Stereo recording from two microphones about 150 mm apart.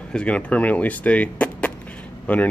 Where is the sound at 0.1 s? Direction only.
5° left (ahead or behind).